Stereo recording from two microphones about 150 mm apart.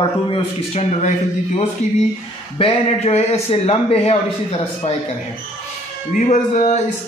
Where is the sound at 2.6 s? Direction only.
45° left (ahead or behind).